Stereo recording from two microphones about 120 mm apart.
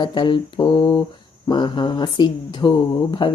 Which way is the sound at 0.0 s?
40° left (ahead or behind).